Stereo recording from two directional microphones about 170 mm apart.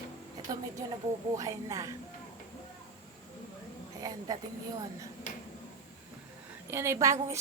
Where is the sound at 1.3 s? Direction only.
20° right (ahead or behind).